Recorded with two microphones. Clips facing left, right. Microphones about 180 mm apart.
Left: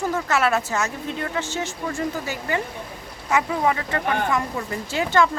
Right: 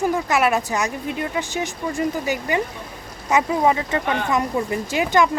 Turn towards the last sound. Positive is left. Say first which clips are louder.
# right 2 dB
turn(degrees=-15)  # may be behind; listen again after turning